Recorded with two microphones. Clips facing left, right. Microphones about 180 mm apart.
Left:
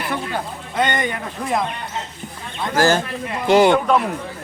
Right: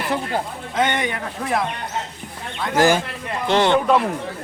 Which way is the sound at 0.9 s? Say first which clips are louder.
Left 1 dB; 10° right (ahead or behind).